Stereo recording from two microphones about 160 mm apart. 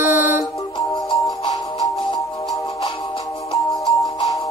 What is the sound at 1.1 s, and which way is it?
Music, 25° left (ahead or behind).